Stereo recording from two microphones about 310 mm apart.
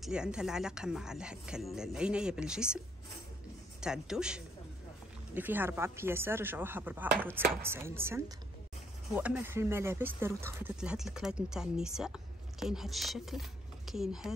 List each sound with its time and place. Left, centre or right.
0.0 s speech: centre
3.8 s speech: centre